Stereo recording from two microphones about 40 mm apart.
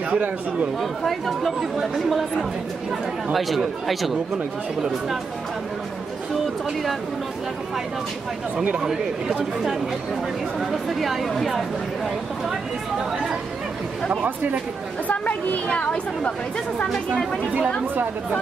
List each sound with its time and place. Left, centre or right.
0.1 s speech: right
0.7 s speech: centre
3.3 s speech: centre
6.4 s speech: centre
8.7 s speech: centre
10.7 s speech: centre
15.0 s a woman's voice: left
15.7 s speech: left
16.9 s speech: centre